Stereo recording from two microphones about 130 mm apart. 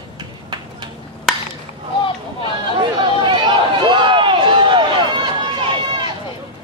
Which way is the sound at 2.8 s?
40° right (ahead or behind).